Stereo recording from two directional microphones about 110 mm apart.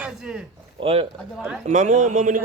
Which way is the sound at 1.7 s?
90° right.